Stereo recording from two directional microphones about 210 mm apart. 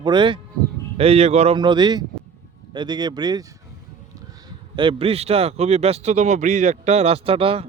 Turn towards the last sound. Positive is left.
turn(degrees=-25)  # may be behind; listen again after turning